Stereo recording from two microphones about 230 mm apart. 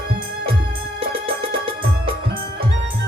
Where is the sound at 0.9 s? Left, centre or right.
Right.